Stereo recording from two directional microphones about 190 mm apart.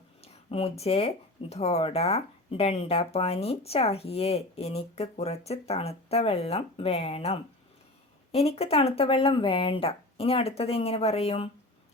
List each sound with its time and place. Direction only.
0.2 s speech: 30° left (ahead or behind)